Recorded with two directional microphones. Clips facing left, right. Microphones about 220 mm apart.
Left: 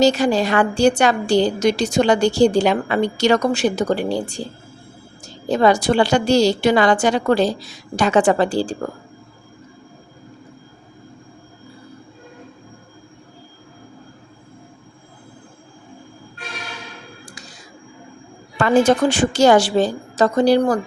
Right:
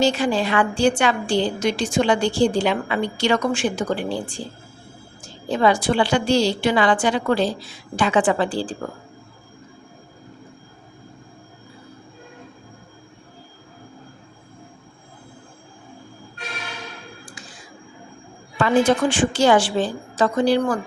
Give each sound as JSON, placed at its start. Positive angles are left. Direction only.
{"t": 0.0, "sound": "a woman's voice", "side_deg": 40}
{"t": 18.5, "sound": "a woman's voice", "side_deg": 45}